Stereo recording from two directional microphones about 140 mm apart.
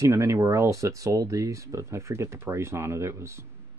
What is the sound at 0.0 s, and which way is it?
Speech, 20° right (ahead or behind).